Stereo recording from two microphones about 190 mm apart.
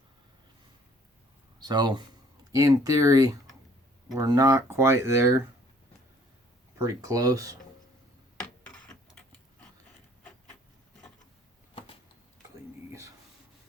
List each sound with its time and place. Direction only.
1.5 s speech: 20° right (ahead or behind)
6.8 s speech: 20° right (ahead or behind)
8.4 s a sound: 5° left (ahead or behind)